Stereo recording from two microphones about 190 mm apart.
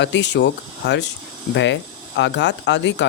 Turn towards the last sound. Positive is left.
turn(degrees=70)  # may be behind; listen again after turning